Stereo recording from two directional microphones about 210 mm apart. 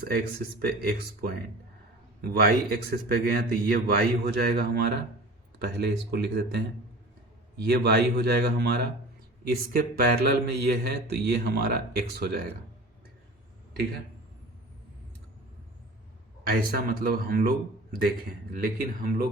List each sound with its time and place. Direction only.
0.1 s speech: 50° right (ahead or behind)
16.4 s speech: 45° right (ahead or behind)